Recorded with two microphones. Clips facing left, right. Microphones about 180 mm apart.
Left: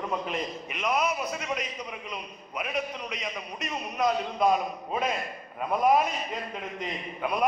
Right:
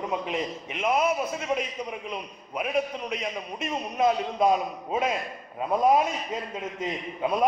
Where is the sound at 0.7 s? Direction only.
25° right (ahead or behind).